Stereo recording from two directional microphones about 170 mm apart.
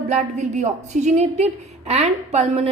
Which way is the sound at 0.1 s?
40° right (ahead or behind).